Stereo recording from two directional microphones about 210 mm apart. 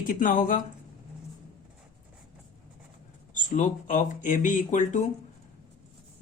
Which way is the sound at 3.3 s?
40° left (ahead or behind).